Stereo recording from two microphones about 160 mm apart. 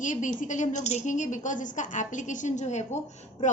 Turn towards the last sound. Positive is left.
turn(degrees=45)  # may be behind; listen again after turning